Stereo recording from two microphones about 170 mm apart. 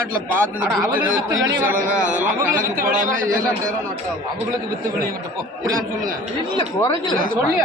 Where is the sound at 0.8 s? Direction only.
10° right (ahead or behind).